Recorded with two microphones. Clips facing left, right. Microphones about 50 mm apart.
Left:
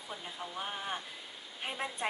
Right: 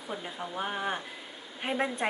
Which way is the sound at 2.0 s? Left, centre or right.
Right.